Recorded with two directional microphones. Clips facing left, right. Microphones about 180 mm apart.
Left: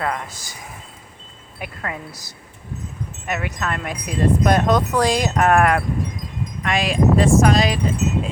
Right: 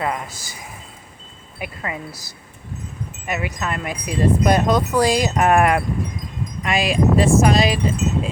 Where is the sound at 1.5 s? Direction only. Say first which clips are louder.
Right 1 dB; 5° right (ahead or behind).